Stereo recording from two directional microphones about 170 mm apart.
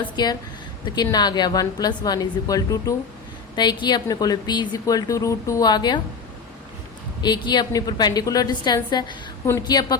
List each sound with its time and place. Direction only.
0.0 s a woman's voice: 25° left (ahead or behind)
7.2 s a woman's voice: 25° left (ahead or behind)